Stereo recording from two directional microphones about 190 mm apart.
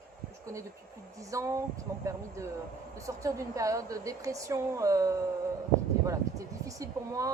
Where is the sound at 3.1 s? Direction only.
15° right (ahead or behind).